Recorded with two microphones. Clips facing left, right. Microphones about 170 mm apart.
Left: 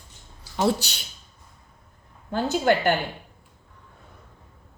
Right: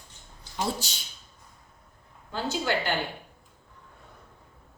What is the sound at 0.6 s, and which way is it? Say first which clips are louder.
Speech: left 8 dB; 70° left (ahead or behind).